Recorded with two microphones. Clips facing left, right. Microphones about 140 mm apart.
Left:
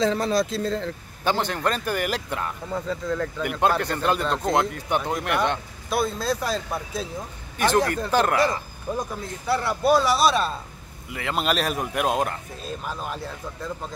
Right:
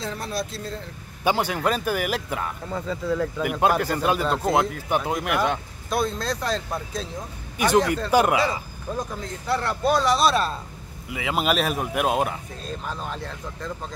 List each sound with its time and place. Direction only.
0.0 s speech: 90° left
1.2 s speech: 10° right (ahead or behind); by 7.1 s 5° left (ahead or behind)
7.5 s speech: 10° right (ahead or behind)
8.9 s speech: 5° left (ahead or behind)
12.6 s speech: 5° left (ahead or behind)